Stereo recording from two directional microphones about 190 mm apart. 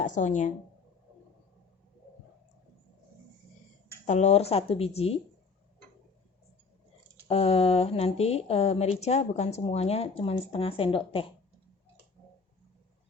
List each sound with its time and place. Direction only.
0.0 s speech: 40° left (ahead or behind)
4.0 s speech: 35° left (ahead or behind)
7.3 s speech: 30° left (ahead or behind)